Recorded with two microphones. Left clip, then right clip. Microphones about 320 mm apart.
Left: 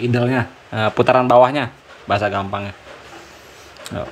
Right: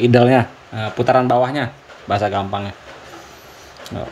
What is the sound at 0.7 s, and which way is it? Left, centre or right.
Speech, centre.